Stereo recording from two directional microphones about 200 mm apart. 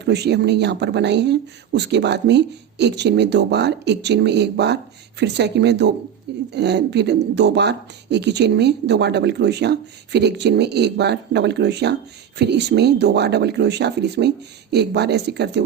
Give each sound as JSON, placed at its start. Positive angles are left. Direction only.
{"t": 0.0, "sound": "speech", "side_deg": -55}